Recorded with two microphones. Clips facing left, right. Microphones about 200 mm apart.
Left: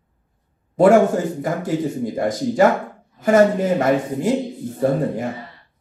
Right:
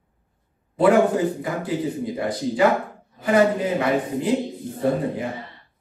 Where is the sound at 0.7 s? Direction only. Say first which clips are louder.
Left 4 dB; 45° left (ahead or behind).